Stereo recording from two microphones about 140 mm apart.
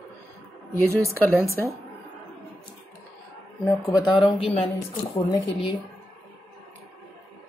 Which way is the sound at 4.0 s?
35° left (ahead or behind).